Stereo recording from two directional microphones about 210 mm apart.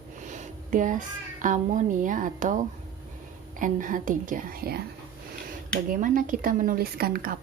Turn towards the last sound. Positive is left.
turn(degrees=-45)  # may be behind; listen again after turning